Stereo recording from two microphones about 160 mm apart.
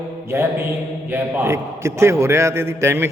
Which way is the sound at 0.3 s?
15° right (ahead or behind).